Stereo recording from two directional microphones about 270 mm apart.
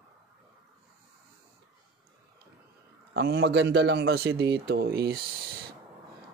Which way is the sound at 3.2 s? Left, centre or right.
Right.